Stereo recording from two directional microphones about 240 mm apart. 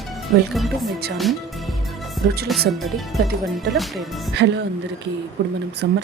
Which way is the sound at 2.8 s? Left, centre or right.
Centre.